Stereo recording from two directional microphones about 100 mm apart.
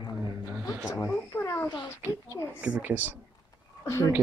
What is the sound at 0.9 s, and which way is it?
A child's voice, 30° left (ahead or behind).